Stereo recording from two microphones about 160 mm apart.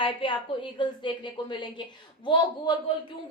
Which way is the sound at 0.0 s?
30° left (ahead or behind).